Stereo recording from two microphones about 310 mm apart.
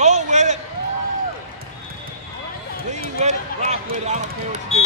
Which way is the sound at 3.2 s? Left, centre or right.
Right.